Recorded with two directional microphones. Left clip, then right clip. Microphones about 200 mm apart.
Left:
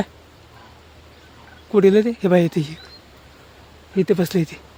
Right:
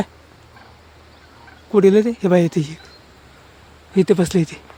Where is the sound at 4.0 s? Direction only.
20° right (ahead or behind).